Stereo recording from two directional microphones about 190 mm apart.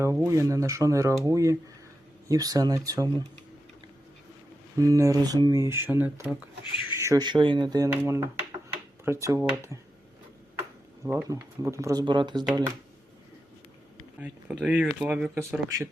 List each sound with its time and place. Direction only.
0.0 s speech: 15° right (ahead or behind)
4.8 s speech: 15° right (ahead or behind)
9.2 s speech: 15° right (ahead or behind)
11.0 s speech: 15° right (ahead or behind)
14.2 s speech: 5° right (ahead or behind)